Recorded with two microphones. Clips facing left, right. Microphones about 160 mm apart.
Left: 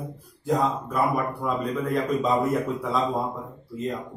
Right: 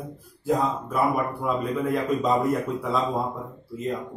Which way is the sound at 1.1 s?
5° right (ahead or behind).